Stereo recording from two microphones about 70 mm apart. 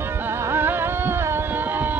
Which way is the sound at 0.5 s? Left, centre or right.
Right.